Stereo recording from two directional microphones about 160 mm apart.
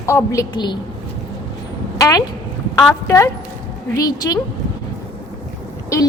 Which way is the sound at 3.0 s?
20° left (ahead or behind).